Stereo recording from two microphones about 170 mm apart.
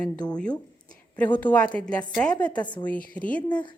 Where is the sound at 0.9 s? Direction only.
10° left (ahead or behind).